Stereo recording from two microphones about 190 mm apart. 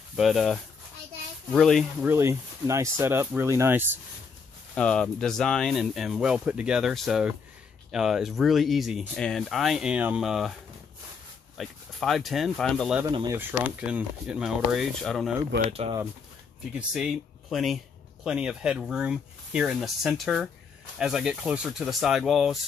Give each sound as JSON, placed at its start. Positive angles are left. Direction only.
{"t": 0.1, "sound": "speech", "side_deg": 0}
{"t": 2.0, "sound": "speech", "side_deg": -15}
{"t": 4.7, "sound": "speech", "side_deg": 5}
{"t": 11.5, "sound": "speech", "side_deg": 0}
{"t": 13.1, "sound": "speech", "side_deg": -20}
{"t": 13.4, "sound": "speech", "side_deg": -10}
{"t": 15.7, "sound": "speech", "side_deg": -30}
{"t": 16.7, "sound": "speech", "side_deg": -5}